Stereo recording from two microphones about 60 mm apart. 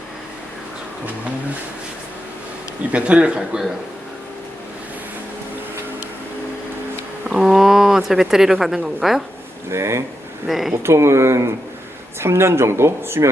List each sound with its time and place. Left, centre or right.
2.9 s speech: right
7.3 s speech: centre
9.7 s speech: right
10.4 s speech: centre
10.8 s speech: right